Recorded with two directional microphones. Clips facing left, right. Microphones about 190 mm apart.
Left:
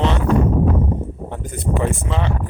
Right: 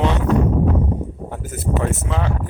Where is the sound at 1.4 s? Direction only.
5° right (ahead or behind).